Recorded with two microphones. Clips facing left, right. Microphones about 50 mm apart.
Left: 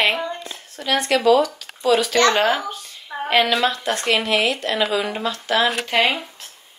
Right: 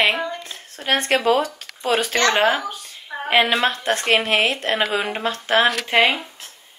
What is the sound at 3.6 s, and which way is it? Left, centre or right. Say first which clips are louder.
Speech: even; right.